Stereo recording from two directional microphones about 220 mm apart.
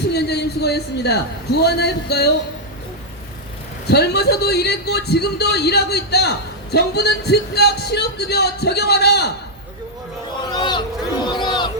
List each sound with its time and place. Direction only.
0.1 s a man's voice: 50° left (ahead or behind)
3.8 s a man's voice: 50° left (ahead or behind)
10.4 s a sound: 20° left (ahead or behind)